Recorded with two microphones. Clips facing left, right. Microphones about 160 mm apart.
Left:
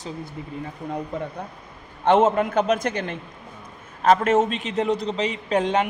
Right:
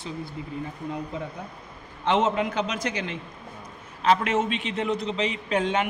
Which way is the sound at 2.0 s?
50° left (ahead or behind).